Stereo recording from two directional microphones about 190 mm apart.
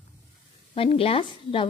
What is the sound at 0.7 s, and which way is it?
Speech, 30° left (ahead or behind).